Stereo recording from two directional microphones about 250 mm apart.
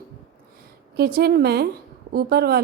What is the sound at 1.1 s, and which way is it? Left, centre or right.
A woman's voice, right.